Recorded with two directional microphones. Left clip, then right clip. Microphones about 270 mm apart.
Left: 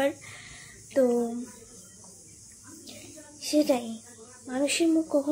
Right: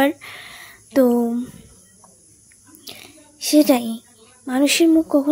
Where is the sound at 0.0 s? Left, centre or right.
Right.